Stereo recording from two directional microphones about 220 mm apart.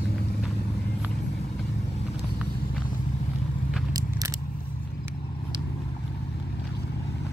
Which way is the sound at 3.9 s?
15° right (ahead or behind).